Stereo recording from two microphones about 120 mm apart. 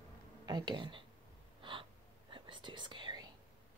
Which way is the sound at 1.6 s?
45° right (ahead or behind).